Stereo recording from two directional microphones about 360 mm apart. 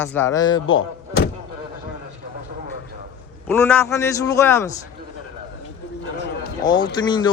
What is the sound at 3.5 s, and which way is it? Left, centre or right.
Speech, centre.